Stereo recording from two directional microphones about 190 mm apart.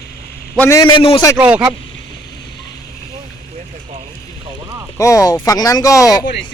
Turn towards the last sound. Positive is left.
turn(degrees=20)  # may be behind; listen again after turning